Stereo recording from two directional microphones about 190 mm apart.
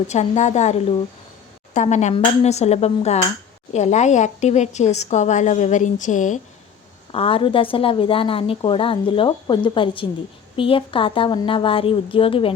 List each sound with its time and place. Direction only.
0.1 s a woman's voice: 40° left (ahead or behind)
7.1 s a woman's voice: 30° left (ahead or behind)